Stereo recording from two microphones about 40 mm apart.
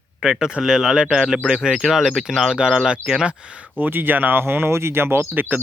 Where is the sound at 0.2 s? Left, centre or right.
Centre.